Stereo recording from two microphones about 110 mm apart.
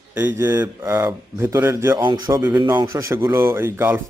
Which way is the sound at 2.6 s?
35° right (ahead or behind).